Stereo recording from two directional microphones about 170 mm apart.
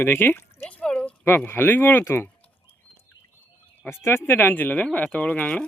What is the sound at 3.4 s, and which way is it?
Speech, 10° left (ahead or behind).